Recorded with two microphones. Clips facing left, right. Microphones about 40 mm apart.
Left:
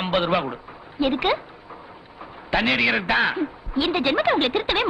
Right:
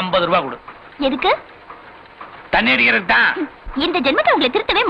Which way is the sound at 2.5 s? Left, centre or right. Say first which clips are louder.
Right 6 dB; right.